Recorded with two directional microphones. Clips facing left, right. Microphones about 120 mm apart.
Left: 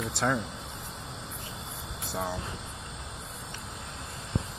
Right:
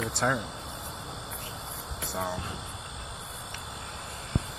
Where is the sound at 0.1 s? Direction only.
Centre (ahead or behind).